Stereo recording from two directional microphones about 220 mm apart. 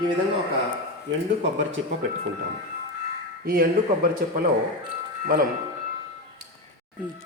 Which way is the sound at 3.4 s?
45° right (ahead or behind).